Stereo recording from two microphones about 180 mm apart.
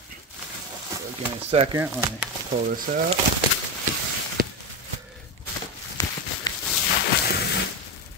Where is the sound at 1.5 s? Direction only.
30° right (ahead or behind).